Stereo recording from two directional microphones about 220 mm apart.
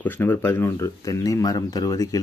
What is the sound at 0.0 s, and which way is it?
Speech, 10° left (ahead or behind).